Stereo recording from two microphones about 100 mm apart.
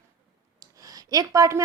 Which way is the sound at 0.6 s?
40° right (ahead or behind).